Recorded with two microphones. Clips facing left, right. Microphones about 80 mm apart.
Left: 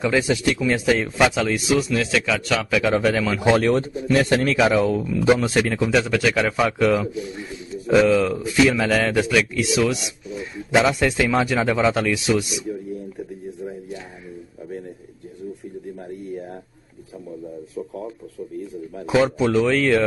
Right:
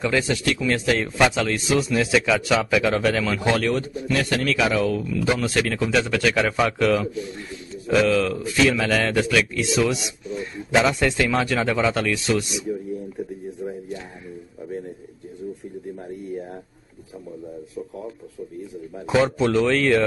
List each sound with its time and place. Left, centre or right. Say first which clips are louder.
0.0 s a man's voice: left 2 dB; centre
1.9 s speech: right 2 dB; centre
2.9 s a man's voice: left 2 dB; centre
3.3 s a man's voice: left 4 dB; centre
5.8 s a man's voice: left 2 dB; centre
19.0 s a man's voice: left 1 dB; centre